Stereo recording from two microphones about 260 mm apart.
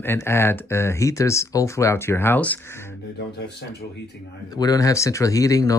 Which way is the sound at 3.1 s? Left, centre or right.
Left.